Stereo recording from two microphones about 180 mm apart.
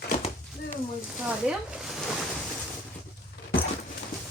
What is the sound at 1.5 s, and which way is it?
Speech, 5° right (ahead or behind).